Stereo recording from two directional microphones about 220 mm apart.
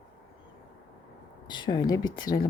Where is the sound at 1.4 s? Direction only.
20° left (ahead or behind).